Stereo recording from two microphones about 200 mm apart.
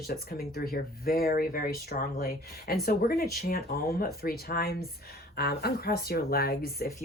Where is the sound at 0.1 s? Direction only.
50° left (ahead or behind).